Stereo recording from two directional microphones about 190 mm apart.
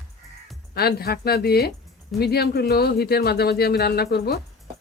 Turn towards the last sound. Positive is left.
turn(degrees=55)  # may be behind; listen again after turning